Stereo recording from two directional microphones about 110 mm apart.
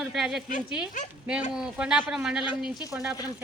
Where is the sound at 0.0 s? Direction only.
5° right (ahead or behind).